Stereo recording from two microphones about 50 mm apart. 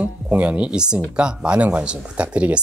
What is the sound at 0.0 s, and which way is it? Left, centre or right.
Speech, right.